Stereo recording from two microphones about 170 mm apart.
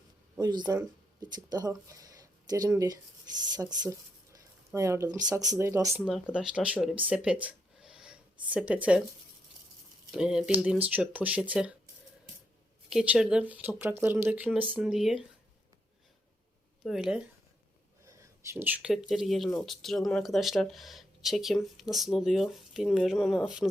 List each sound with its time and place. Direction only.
0.3 s speech: 25° right (ahead or behind)
6.3 s speech: 5° right (ahead or behind)
10.1 s speech: 5° right (ahead or behind)
12.9 s speech: 5° right (ahead or behind)
16.8 s speech: centre (ahead or behind)
18.5 s speech: 10° right (ahead or behind)